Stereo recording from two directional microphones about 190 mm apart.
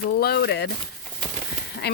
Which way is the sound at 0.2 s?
55° left (ahead or behind).